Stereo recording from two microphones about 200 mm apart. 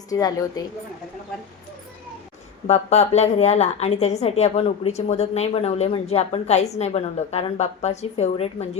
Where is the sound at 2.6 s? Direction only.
35° left (ahead or behind).